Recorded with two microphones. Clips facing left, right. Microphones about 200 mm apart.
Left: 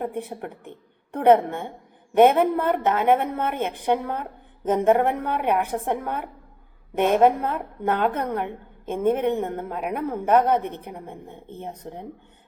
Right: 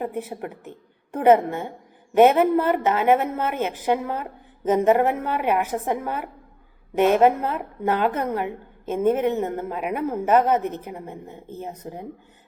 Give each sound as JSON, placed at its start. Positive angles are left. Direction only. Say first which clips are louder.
{"t": 0.0, "sound": "a woman's voice", "louder": "right 1 dB", "side_deg": -5}